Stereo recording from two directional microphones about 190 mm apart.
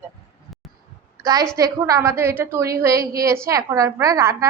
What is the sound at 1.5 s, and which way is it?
A woman's voice, 15° right (ahead or behind).